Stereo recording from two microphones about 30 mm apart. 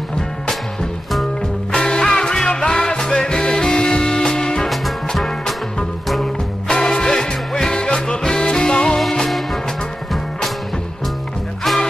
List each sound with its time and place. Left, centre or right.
1.7 s music: left
5.1 s music: centre
6.7 s music: left
7.7 s music: left
9.2 s music: centre